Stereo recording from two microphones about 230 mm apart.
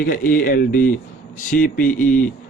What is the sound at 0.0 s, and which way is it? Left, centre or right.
Speech, left.